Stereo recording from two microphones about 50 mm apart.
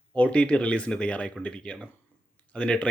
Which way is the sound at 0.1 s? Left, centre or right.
Left.